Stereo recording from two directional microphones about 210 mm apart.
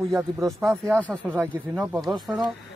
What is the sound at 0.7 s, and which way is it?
Speech, 15° right (ahead or behind).